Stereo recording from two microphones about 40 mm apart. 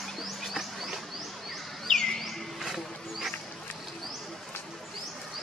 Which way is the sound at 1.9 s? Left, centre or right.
Centre.